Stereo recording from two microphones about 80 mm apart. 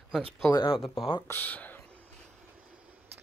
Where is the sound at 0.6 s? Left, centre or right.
Left.